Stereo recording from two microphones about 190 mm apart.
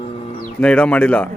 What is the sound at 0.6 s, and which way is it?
Speech, 5° left (ahead or behind).